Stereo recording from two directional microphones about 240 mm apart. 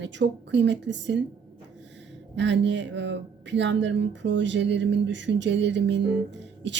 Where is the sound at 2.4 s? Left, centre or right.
Right.